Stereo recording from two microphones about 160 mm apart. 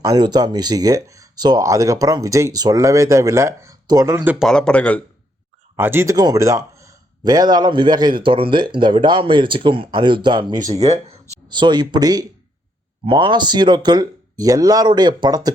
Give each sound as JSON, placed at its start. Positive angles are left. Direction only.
{"t": 0.0, "sound": "speech", "side_deg": -25}
{"t": 4.4, "sound": "speech", "side_deg": 5}
{"t": 5.7, "sound": "speech", "side_deg": -15}
{"t": 10.8, "sound": "speech", "side_deg": -45}
{"t": 11.4, "sound": "speech", "side_deg": -30}